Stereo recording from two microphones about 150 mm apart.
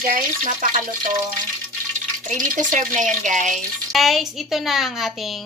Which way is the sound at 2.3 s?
55° right (ahead or behind).